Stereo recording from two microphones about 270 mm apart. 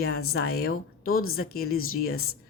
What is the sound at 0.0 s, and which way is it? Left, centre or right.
Speech, left.